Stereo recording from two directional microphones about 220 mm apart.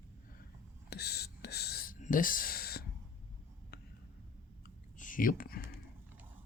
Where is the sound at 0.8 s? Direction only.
45° left (ahead or behind).